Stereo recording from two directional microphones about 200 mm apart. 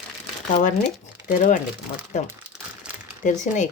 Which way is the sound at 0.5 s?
40° left (ahead or behind).